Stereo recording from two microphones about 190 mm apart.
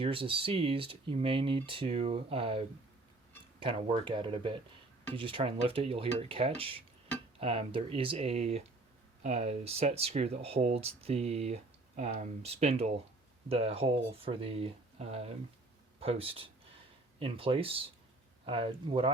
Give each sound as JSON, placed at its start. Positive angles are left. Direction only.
{"t": 0.0, "sound": "speech", "side_deg": -30}